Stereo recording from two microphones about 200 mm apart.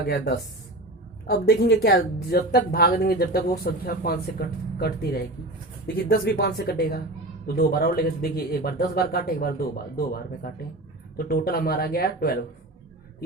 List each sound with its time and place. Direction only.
1.3 s speech: 50° left (ahead or behind)